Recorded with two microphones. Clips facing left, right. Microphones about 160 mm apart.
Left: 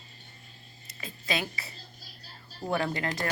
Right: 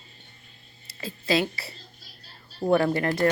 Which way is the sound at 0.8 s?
30° right (ahead or behind).